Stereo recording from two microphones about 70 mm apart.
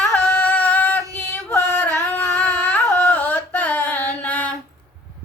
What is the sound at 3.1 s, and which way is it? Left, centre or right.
Mantra, left.